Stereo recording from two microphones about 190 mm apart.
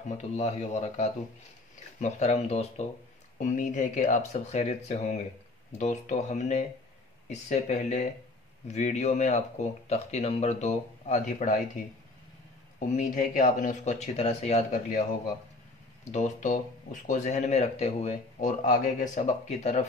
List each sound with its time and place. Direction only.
0.4 s speech: 35° left (ahead or behind)
12.7 s speech: 40° left (ahead or behind)